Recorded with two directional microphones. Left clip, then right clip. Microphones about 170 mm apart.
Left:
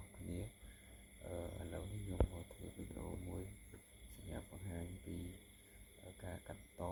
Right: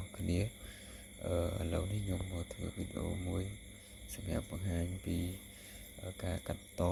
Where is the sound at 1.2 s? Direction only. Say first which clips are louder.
Right 12 dB; 25° right (ahead or behind).